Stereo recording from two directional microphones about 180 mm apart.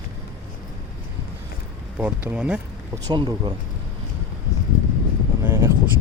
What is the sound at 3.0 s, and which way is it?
Speech, 25° right (ahead or behind).